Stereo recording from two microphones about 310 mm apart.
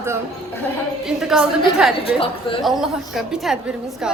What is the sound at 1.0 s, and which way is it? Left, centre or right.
A woman's voice, centre.